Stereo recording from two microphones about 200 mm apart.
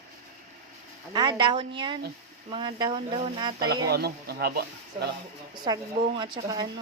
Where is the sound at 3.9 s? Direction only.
55° right (ahead or behind).